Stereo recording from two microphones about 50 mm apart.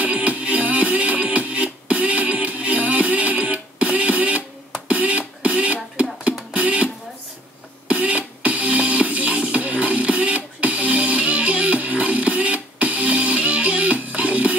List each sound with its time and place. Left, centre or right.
0.0 s music: right
4.8 s a sound: right
6.5 s music: right
7.9 s music: right